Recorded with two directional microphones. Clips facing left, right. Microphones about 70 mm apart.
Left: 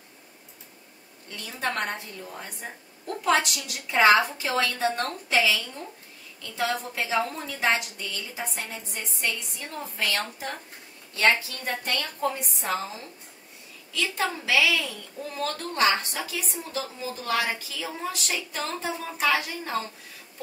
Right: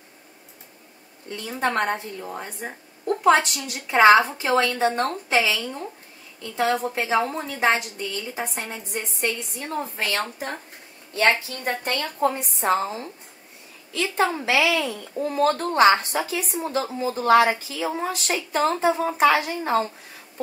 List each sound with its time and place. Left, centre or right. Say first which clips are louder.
1.3 s a woman's voice: right 6 dB; right